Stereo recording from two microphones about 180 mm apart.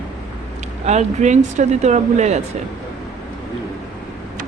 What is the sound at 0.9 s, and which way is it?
Speech, 40° right (ahead or behind).